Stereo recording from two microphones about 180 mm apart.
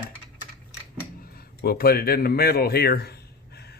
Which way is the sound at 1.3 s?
55° left (ahead or behind).